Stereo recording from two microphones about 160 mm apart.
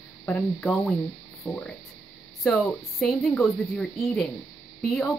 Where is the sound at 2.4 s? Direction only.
Centre (ahead or behind).